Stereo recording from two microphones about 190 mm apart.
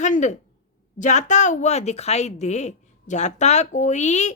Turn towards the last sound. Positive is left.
turn(degrees=40)  # may be behind; listen again after turning